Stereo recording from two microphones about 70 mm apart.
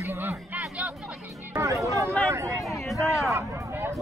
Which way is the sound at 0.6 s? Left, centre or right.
Centre.